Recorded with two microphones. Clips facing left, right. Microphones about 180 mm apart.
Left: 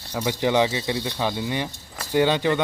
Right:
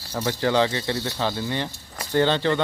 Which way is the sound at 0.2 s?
15° left (ahead or behind).